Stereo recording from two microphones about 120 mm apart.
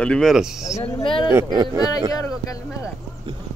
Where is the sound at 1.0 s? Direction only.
45° left (ahead or behind).